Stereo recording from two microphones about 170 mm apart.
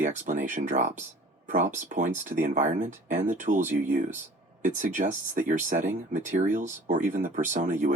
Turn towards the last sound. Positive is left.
turn(degrees=-50)  # may be behind; listen again after turning